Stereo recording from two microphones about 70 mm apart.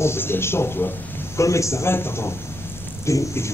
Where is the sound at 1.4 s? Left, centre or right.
Left.